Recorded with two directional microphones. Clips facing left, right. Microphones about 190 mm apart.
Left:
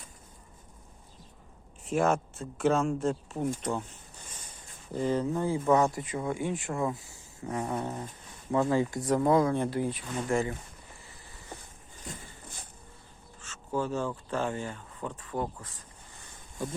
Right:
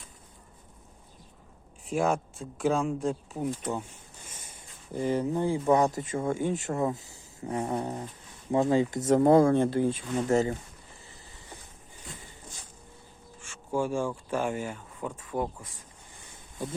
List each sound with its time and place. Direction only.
1.9 s speech: centre (ahead or behind)
4.9 s speech: 10° right (ahead or behind)
5.2 s speech: 20° right (ahead or behind)
5.6 s speech: 35° right (ahead or behind)
6.9 s speech: 20° right (ahead or behind)
8.5 s speech: 20° right (ahead or behind)
9.2 s speech: 50° right (ahead or behind)
9.6 s speech: 25° right (ahead or behind)
10.3 s speech: 40° right (ahead or behind)
12.0 s a sound: 50° left (ahead or behind)
13.4 s speech: 10° right (ahead or behind)